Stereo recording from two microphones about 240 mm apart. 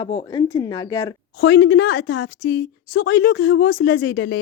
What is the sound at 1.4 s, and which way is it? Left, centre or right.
A woman's voice, left.